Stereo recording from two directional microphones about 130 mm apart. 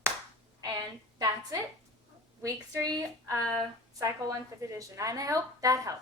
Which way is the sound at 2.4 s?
25° right (ahead or behind).